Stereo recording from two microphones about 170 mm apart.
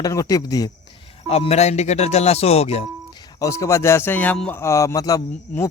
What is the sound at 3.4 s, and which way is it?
A man's voice, 20° left (ahead or behind).